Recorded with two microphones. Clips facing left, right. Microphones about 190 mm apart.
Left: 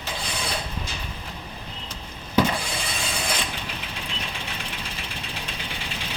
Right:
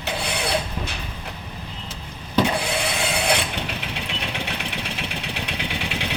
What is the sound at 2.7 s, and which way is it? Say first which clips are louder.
Vehicle: right 7 dB; 65° right (ahead or behind).